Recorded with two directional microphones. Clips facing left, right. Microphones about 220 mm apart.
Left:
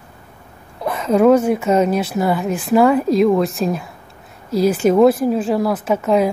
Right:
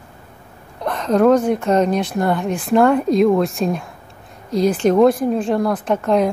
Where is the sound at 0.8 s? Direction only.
5° left (ahead or behind).